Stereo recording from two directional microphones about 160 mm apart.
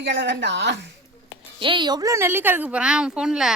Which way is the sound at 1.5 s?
30° right (ahead or behind).